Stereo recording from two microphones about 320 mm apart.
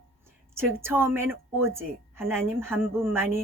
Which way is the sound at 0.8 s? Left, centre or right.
Centre.